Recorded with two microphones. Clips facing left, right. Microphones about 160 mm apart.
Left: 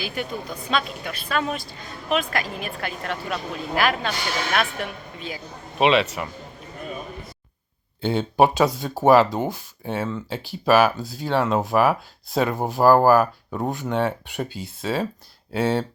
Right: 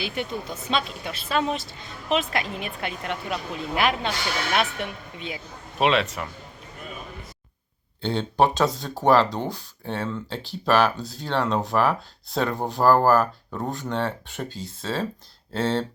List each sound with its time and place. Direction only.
0.0 s speech: 25° right (ahead or behind)
5.8 s speech: centre (ahead or behind)
8.0 s speech: 10° left (ahead or behind)